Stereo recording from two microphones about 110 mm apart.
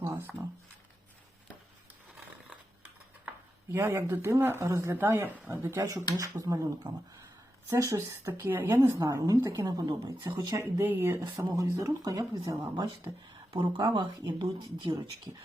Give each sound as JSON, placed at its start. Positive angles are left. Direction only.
{"t": 0.0, "sound": "a sound", "side_deg": -20}
{"t": 3.7, "sound": "speech", "side_deg": -25}
{"t": 9.0, "sound": "speech", "side_deg": -35}
{"t": 10.6, "sound": "speech", "side_deg": -20}
{"t": 11.5, "sound": "speech", "side_deg": -30}